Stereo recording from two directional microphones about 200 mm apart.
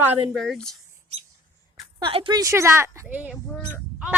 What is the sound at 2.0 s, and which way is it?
Speech, 25° right (ahead or behind).